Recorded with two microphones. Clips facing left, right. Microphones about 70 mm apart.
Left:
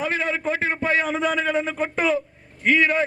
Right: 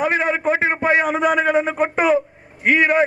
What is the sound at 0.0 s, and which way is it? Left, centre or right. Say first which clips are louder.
A man's voice: right 6 dB; right.